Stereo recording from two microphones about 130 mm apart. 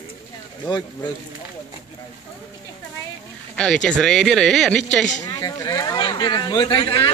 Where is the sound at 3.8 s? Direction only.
5° left (ahead or behind).